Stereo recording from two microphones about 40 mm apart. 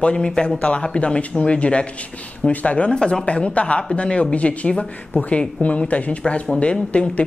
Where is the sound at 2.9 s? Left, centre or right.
Left.